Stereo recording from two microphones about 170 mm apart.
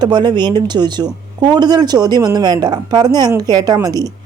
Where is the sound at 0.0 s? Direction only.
25° right (ahead or behind).